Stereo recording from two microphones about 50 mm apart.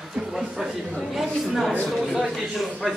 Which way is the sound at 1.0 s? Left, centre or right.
Centre.